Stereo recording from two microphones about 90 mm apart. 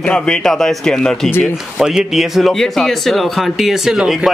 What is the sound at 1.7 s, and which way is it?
Speech, 5° right (ahead or behind).